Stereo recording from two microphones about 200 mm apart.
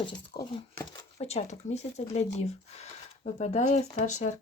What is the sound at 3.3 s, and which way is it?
Speech, 35° left (ahead or behind).